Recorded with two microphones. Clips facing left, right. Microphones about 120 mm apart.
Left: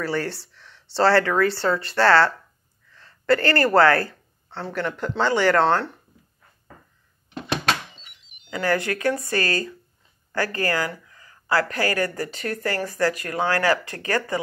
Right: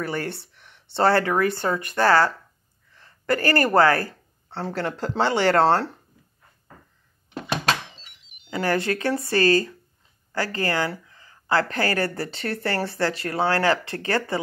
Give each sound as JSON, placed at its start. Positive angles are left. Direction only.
{"t": 0.0, "sound": "speech", "side_deg": -20}
{"t": 4.6, "sound": "speech", "side_deg": -35}
{"t": 8.6, "sound": "speech", "side_deg": -25}
{"t": 11.8, "sound": "speech", "side_deg": -35}